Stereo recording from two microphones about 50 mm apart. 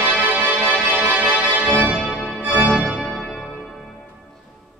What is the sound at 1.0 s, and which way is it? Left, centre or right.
Organ, right.